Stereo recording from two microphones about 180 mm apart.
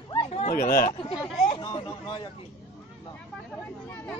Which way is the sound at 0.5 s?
55° left (ahead or behind).